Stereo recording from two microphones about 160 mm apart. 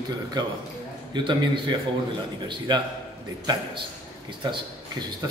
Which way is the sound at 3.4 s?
30° right (ahead or behind).